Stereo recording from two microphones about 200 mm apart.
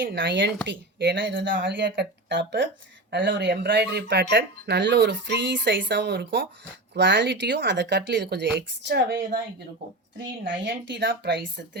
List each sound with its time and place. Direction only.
0.0 s speech: 60° right (ahead or behind)
10.2 s speech: 65° right (ahead or behind)